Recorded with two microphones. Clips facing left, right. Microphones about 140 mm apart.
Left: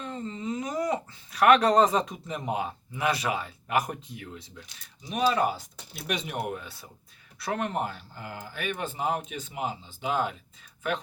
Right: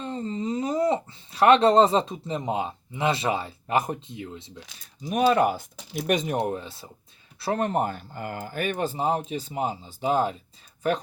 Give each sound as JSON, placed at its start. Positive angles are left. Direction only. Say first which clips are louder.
{"t": 0.0, "sound": "speech", "louder": "right 5 dB", "side_deg": -35}
{"t": 5.0, "sound": "speech", "louder": "right 5 dB", "side_deg": -50}